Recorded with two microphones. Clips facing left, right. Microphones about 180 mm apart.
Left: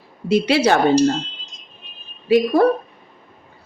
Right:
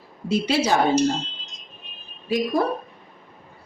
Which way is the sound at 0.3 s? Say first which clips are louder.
Left 5 dB; 70° left (ahead or behind).